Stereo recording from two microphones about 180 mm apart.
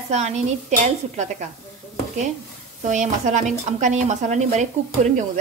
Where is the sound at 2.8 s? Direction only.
45° right (ahead or behind).